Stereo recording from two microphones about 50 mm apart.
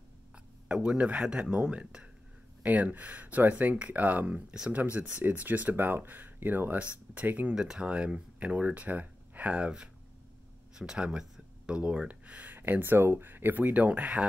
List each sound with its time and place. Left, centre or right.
0.7 s speech: right
1.1 s speech: centre
1.4 s speech: right
2.6 s speech: right
7.4 s speech: centre
10.7 s speech: centre; by 12.5 s right
12.5 s speech: right